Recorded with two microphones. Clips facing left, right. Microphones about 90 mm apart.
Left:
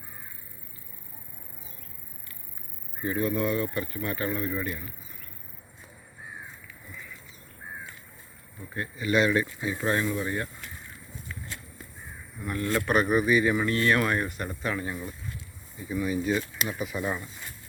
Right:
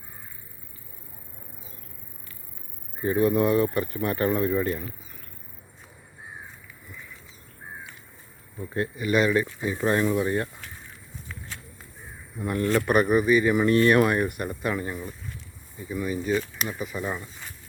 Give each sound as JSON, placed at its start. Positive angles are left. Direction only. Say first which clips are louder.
{"t": 3.0, "sound": "speech", "louder": "right 6 dB", "side_deg": -25}
{"t": 9.1, "sound": "speech", "louder": "right 2 dB", "side_deg": -10}
{"t": 9.6, "sound": "speech", "louder": "right 4 dB", "side_deg": -20}
{"t": 12.4, "sound": "speech", "louder": "right 5 dB", "side_deg": -30}
{"t": 12.8, "sound": "speech", "louder": "right 1 dB", "side_deg": -10}
{"t": 13.6, "sound": "speech", "louder": "right 6 dB", "side_deg": -20}